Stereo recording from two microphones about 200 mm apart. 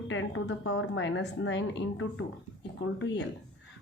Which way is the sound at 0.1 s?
70° left (ahead or behind).